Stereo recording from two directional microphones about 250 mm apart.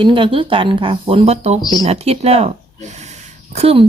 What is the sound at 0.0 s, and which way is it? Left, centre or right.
Speech, centre.